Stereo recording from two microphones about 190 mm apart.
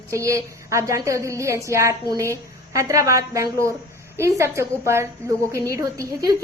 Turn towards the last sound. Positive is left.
turn(degrees=-15)  # may be behind; listen again after turning